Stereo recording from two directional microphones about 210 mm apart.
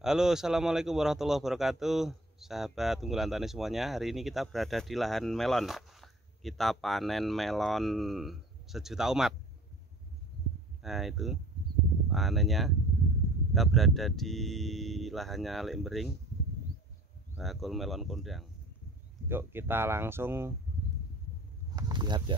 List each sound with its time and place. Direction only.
0.0 s speech: 5° right (ahead or behind)
10.8 s speech: centre (ahead or behind)
17.4 s speech: centre (ahead or behind)
19.2 s speech: 10° right (ahead or behind)
21.7 s snake: 20° right (ahead or behind)